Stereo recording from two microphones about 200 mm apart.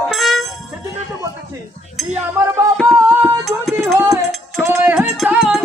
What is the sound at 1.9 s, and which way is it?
Chink, 5° right (ahead or behind).